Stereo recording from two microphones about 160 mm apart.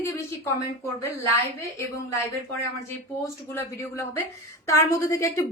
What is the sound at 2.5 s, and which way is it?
A woman's voice, 15° left (ahead or behind).